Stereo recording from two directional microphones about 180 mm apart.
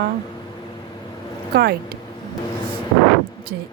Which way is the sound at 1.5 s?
65° right (ahead or behind).